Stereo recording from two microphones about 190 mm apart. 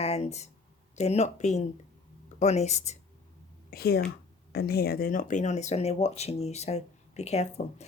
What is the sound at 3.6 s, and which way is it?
A woman's voice, 55° left (ahead or behind).